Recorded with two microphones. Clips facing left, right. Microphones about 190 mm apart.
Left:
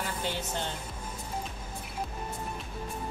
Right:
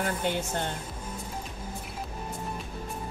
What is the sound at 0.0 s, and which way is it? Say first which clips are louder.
Speech: right 5 dB; 55° right (ahead or behind).